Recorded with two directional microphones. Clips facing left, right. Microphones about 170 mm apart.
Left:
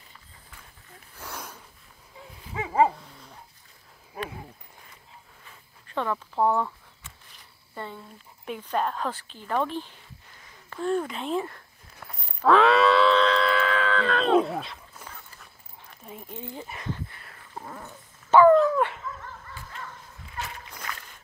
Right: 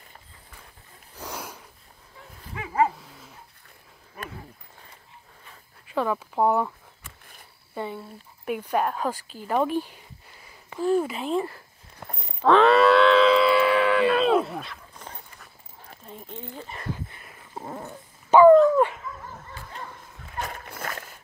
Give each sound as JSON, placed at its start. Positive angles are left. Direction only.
{"t": 1.1, "sound": "a sound", "side_deg": -10}
{"t": 5.9, "sound": "speech", "side_deg": -10}
{"t": 7.7, "sound": "speech", "side_deg": -15}
{"t": 12.4, "sound": "cattle", "side_deg": 0}
{"t": 15.0, "sound": "clip-clop", "side_deg": 10}
{"t": 16.0, "sound": "speech", "side_deg": 5}
{"t": 16.9, "sound": "a sound", "side_deg": -15}
{"t": 17.6, "sound": "dog", "side_deg": -20}
{"t": 20.3, "sound": "a sound", "side_deg": -50}